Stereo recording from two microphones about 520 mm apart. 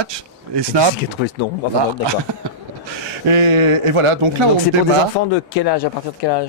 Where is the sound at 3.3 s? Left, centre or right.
Right.